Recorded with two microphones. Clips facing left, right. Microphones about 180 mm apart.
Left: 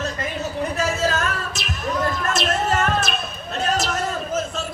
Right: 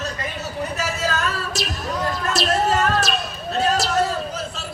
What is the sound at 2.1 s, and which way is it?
Basketball bounce, 35° right (ahead or behind).